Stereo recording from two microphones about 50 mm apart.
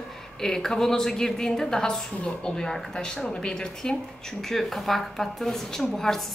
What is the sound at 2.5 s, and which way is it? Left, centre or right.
A woman's voice, centre.